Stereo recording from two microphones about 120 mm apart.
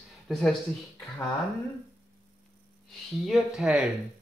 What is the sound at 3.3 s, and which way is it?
Speech, 5° right (ahead or behind).